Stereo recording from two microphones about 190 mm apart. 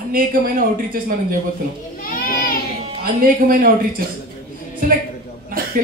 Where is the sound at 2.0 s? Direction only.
45° left (ahead or behind).